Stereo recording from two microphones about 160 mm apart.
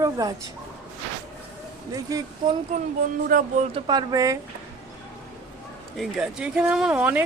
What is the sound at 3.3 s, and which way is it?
Speech, 60° right (ahead or behind).